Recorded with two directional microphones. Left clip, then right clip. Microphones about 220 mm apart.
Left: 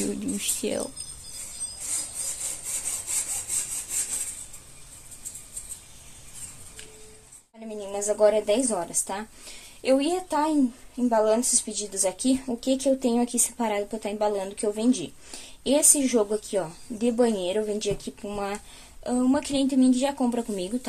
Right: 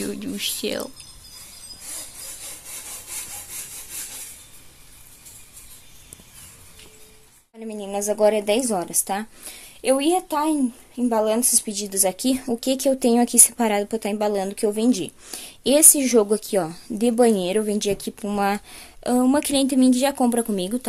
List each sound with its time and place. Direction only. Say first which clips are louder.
0.0 s speech: right 3 dB; centre (ahead or behind)
7.8 s a woman's voice: right 2 dB; 50° right (ahead or behind)